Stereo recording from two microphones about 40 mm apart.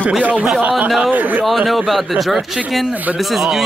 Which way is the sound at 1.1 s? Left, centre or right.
Right.